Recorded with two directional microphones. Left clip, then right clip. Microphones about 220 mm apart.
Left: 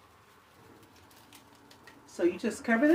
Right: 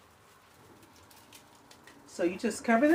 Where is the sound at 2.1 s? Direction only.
10° right (ahead or behind).